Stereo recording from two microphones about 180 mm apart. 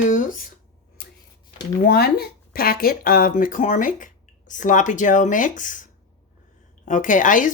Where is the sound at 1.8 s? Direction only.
60° left (ahead or behind).